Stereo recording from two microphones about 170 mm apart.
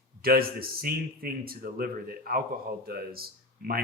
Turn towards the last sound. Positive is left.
turn(degrees=-60)  # may be behind; listen again after turning